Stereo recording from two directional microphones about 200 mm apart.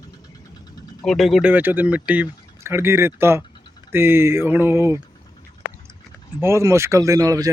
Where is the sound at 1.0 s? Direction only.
Centre (ahead or behind).